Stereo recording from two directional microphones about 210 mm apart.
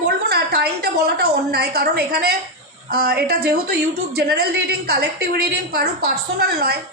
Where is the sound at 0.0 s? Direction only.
50° right (ahead or behind).